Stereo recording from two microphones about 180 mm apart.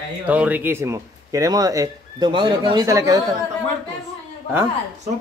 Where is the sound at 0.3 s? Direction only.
10° right (ahead or behind).